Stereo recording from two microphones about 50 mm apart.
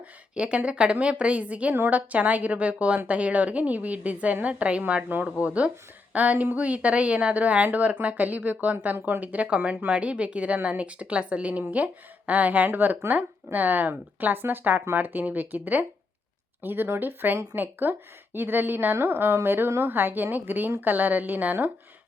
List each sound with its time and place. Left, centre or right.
0.3 s a woman's voice: right